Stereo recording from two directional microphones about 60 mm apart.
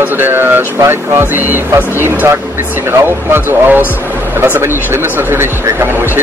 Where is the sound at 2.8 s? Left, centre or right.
Right.